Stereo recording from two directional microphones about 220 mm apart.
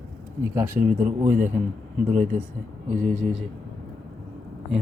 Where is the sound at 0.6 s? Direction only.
10° right (ahead or behind).